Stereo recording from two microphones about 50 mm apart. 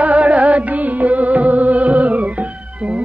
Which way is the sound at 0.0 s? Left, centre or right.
Right.